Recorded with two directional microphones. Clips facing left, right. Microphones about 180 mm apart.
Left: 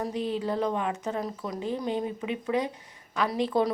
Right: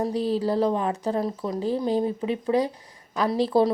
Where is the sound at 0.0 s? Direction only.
35° right (ahead or behind).